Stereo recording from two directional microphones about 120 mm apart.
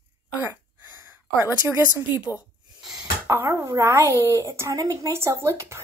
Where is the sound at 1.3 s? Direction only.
20° right (ahead or behind).